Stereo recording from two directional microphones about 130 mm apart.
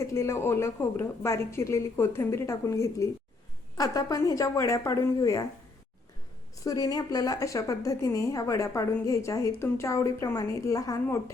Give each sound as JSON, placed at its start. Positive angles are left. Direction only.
{"t": 0.0, "sound": "a woman's voice", "side_deg": 20}
{"t": 6.7, "sound": "a woman's voice", "side_deg": 30}